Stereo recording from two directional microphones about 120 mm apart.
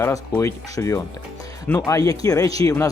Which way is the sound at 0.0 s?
25° left (ahead or behind).